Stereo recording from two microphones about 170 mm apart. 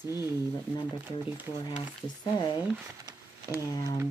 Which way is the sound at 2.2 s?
25° left (ahead or behind).